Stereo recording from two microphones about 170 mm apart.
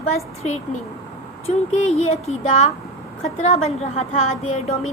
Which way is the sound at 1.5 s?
40° left (ahead or behind).